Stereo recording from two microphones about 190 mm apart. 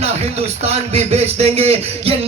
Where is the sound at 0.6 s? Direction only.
35° right (ahead or behind).